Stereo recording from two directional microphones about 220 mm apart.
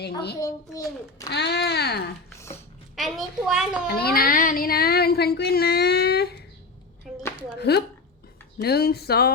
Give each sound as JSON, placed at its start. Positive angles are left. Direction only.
{"t": 0.3, "sound": "a child's voice", "side_deg": 15}
{"t": 1.3, "sound": "speech", "side_deg": 50}
{"t": 2.9, "sound": "a child's voice", "side_deg": 0}
{"t": 3.8, "sound": "speech", "side_deg": 45}
{"t": 7.1, "sound": "a sound", "side_deg": 0}
{"t": 7.6, "sound": "speech", "side_deg": 45}